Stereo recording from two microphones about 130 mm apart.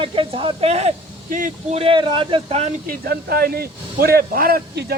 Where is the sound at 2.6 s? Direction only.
65° right (ahead or behind).